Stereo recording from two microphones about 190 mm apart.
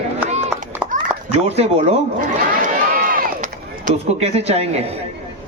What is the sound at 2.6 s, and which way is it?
Chop, 50° right (ahead or behind).